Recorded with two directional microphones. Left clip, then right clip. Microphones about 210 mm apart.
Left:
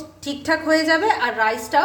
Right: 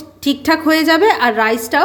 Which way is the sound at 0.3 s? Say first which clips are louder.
Right 6 dB; 45° right (ahead or behind).